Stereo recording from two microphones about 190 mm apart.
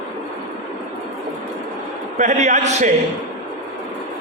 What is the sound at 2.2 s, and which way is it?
Speech, 40° right (ahead or behind).